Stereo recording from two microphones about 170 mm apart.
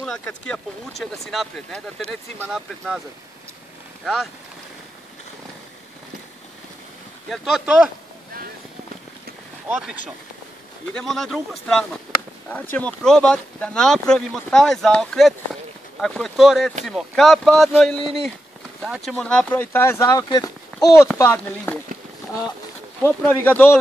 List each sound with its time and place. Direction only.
0.0 s speech: 5° left (ahead or behind)
2.0 s speech: 40° right (ahead or behind)
2.5 s speech: centre (ahead or behind)
7.2 s speech: centre (ahead or behind)
10.9 s speech: 5° left (ahead or behind)
23.0 s speech: 10° left (ahead or behind)